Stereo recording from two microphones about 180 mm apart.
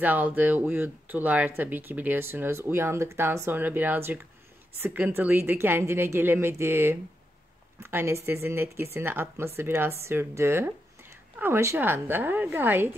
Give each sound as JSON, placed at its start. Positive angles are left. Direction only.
{"t": 0.0, "sound": "speech", "side_deg": -10}